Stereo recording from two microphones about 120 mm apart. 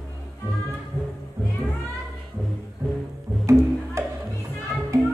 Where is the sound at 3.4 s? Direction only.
25° right (ahead or behind).